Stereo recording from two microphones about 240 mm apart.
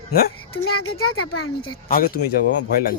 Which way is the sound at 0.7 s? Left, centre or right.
Left.